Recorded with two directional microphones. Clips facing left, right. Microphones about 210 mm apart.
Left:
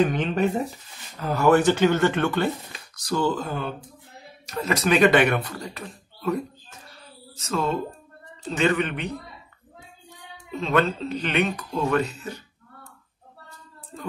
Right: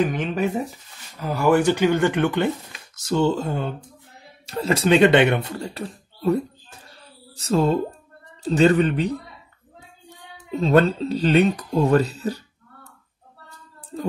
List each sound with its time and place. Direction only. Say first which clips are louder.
0.0 s speech: even; 5° right (ahead or behind); by 9.1 s 35° right (ahead or behind)
10.6 s speech: right 5 dB; 35° right (ahead or behind)